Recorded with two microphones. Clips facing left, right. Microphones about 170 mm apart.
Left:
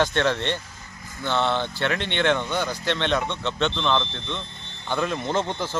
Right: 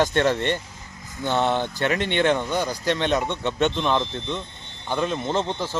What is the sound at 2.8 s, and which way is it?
Speech, 40° right (ahead or behind).